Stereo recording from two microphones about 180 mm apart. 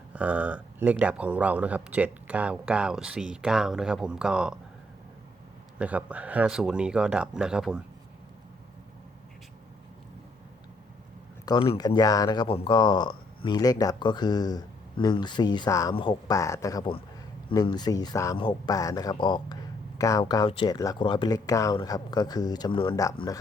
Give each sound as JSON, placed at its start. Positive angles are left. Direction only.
{"t": 0.1, "sound": "speech", "side_deg": -10}
{"t": 5.8, "sound": "speech", "side_deg": -10}
{"t": 11.4, "sound": "speech", "side_deg": 25}